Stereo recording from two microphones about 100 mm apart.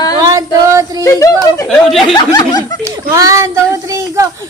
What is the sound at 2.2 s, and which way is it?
Speech, 45° left (ahead or behind).